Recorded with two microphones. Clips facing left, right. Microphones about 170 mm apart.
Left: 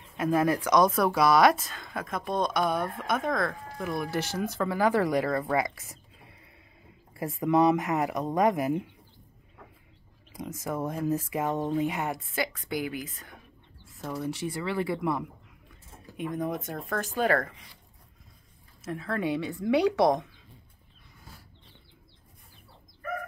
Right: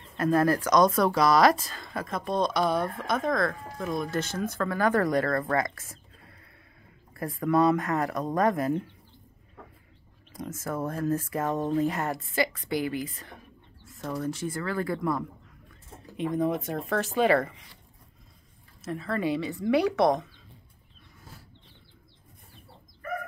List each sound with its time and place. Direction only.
0.2 s speech: 5° left (ahead or behind)
10.3 s speech: 15° left (ahead or behind)
14.4 s speech: 15° left (ahead or behind)
16.2 s speech: centre (ahead or behind)
18.8 s speech: centre (ahead or behind)